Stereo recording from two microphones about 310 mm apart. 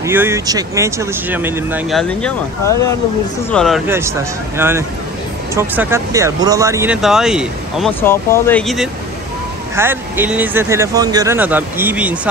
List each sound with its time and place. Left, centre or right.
0.0 s speech: centre